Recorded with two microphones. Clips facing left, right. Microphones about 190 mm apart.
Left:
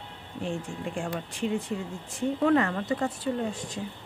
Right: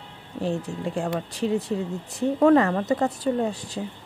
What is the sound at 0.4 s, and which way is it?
Speech, 35° right (ahead or behind).